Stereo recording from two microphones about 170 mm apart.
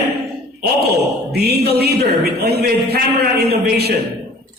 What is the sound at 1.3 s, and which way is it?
A man's voice, 70° right (ahead or behind).